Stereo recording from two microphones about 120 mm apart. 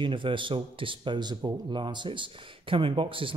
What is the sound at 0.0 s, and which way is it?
Speech, 45° right (ahead or behind).